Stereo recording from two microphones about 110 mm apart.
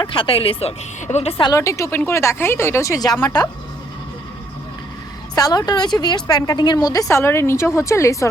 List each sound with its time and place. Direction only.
0.0 s speech: 55° left (ahead or behind); by 1.4 s 80° left
1.5 s a woman's voice: 30° left (ahead or behind)
5.3 s a woman's voice: 35° left (ahead or behind)